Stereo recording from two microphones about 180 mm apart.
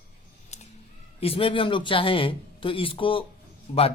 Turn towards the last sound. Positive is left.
turn(degrees=35)  # may be behind; listen again after turning